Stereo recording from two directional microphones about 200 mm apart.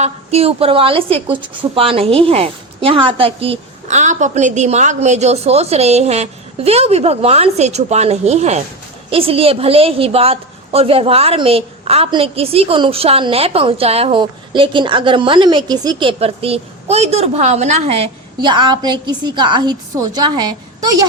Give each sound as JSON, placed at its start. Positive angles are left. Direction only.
{"t": 0.0, "sound": "a woman's voice", "side_deg": -30}